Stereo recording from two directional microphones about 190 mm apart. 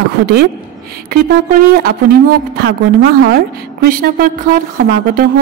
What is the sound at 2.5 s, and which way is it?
A woman's voice, 55° right (ahead or behind).